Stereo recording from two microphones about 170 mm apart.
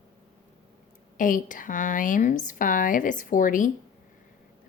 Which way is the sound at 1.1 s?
50° left (ahead or behind).